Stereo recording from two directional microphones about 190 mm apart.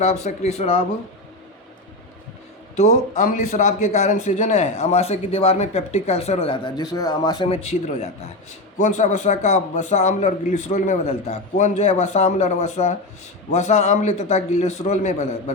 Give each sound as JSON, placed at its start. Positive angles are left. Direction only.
{"t": 0.0, "sound": "a man's voice", "side_deg": 35}
{"t": 2.7, "sound": "a man's voice", "side_deg": 40}